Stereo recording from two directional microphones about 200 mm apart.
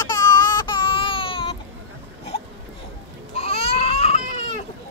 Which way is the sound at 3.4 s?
30° left (ahead or behind).